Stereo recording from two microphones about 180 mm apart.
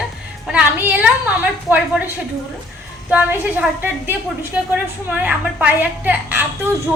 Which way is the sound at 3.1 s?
10° right (ahead or behind).